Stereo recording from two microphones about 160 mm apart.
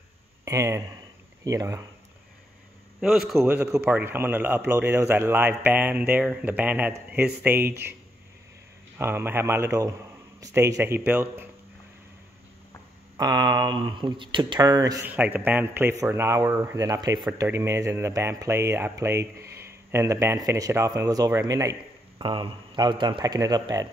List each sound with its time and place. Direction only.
0.5 s speech: 20° right (ahead or behind)
3.0 s a man's voice: centre (ahead or behind)
8.9 s speech: 15° right (ahead or behind)
13.2 s speech: 25° right (ahead or behind)
15.0 s speech: 10° right (ahead or behind)
22.2 s speech: 30° right (ahead or behind)